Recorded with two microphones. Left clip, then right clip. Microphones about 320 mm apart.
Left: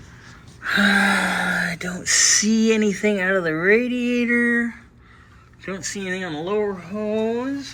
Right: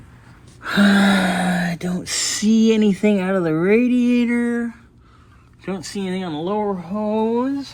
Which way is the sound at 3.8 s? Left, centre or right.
Centre.